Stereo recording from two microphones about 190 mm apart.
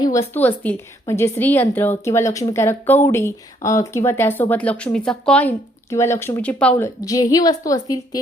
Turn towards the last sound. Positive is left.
turn(degrees=20)  # may be behind; listen again after turning